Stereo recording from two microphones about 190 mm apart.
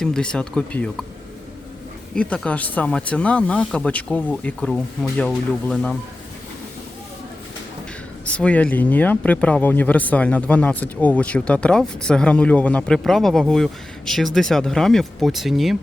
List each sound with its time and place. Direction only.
0.0 s speech: 5° left (ahead or behind)
2.1 s speech: 5° left (ahead or behind)
8.2 s speech: 5° left (ahead or behind)